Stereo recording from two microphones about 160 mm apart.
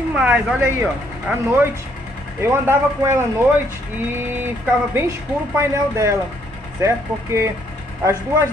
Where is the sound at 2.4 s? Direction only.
15° right (ahead or behind).